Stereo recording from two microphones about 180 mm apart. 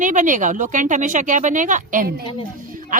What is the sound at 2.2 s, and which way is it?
Speech, 30° left (ahead or behind).